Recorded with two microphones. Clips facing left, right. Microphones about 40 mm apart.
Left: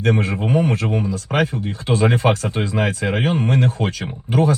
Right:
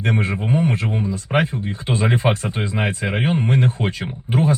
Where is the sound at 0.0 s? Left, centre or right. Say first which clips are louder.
Left 2 dB; right.